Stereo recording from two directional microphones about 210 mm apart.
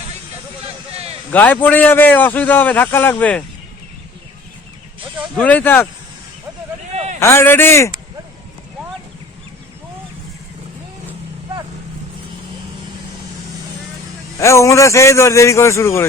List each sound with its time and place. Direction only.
0.6 s a sound: 30° right (ahead or behind)
1.3 s a man's voice: 10° left (ahead or behind)
5.4 s a man's voice: 10° left (ahead or behind)
6.9 s a sound: 30° right (ahead or behind)
7.2 s a man's voice: 10° left (ahead or behind)
14.3 s a man's voice: 15° left (ahead or behind)